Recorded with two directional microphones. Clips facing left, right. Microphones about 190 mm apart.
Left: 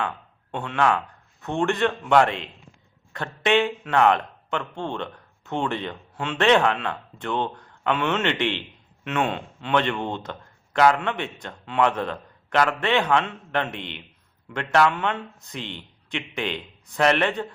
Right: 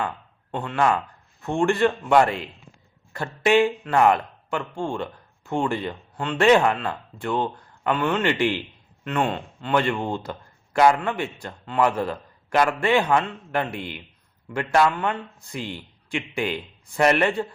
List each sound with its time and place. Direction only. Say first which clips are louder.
0.5 s speech: right 1 dB; centre (ahead or behind)